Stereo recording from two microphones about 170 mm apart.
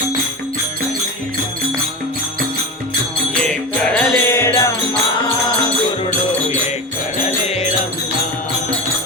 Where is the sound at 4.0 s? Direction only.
15° left (ahead or behind).